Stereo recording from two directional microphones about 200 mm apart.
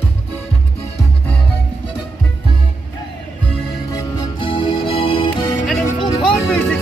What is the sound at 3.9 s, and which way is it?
Music, 20° left (ahead or behind).